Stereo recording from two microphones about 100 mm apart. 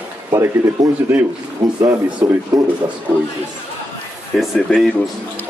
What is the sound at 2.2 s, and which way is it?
Speech, 20° right (ahead or behind).